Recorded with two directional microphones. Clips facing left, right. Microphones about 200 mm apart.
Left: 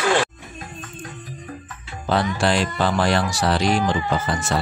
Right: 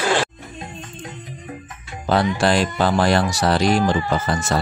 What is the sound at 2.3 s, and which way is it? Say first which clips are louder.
Speech: right 2 dB; 40° right (ahead or behind).